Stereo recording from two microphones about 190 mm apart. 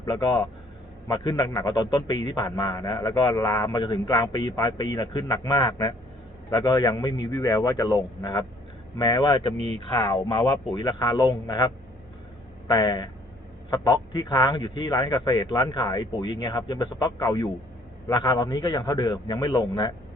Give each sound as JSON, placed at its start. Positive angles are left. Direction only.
{"t": 0.0, "sound": "a man's voice", "side_deg": 20}
{"t": 9.6, "sound": "speech", "side_deg": -35}
{"t": 9.9, "sound": "a man's voice", "side_deg": 20}